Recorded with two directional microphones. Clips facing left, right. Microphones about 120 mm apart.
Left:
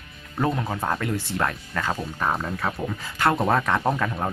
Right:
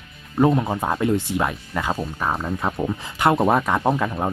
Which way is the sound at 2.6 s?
20° right (ahead or behind).